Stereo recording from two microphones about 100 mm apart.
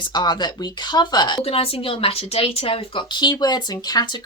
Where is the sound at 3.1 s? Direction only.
45° left (ahead or behind).